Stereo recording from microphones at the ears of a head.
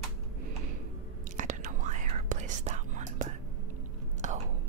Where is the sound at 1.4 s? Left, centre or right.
Right.